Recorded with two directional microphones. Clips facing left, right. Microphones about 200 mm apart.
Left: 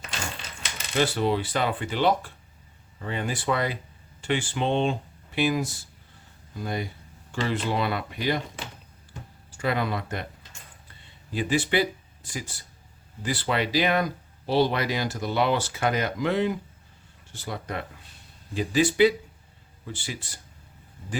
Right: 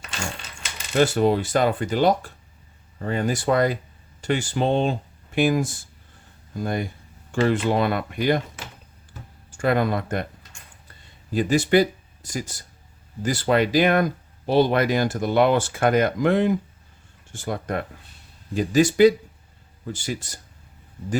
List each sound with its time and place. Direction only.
0.9 s speech: 45° right (ahead or behind)
9.5 s speech: 50° right (ahead or behind)
11.3 s speech: 45° right (ahead or behind)